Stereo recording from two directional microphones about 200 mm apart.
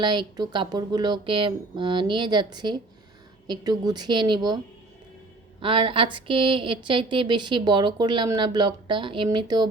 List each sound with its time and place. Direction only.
0.0 s a woman's voice: 20° right (ahead or behind)
5.6 s a woman's voice: 25° right (ahead or behind)